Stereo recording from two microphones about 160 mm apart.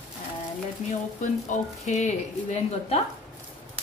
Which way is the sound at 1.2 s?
45° left (ahead or behind).